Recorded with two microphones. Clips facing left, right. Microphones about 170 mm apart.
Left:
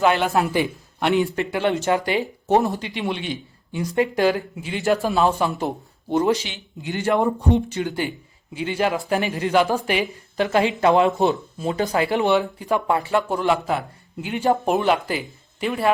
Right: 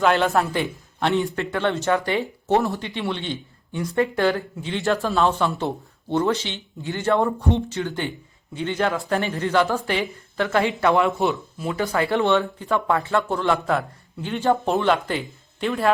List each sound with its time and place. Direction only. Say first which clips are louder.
0.0 s a man's voice: even; 5° left (ahead or behind)
0.3 s speech: left 1 dB; 20° left (ahead or behind)